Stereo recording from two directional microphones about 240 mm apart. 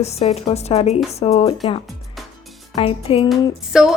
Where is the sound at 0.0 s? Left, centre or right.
Left.